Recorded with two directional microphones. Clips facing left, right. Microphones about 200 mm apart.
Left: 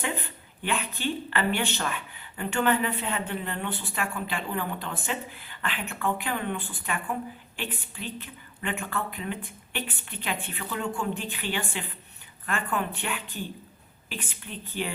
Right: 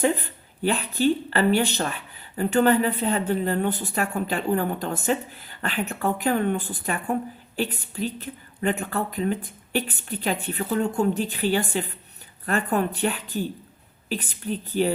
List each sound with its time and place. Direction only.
0.0 s a woman's voice: 40° right (ahead or behind)